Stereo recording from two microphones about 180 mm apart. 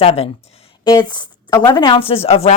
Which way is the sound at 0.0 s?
30° left (ahead or behind).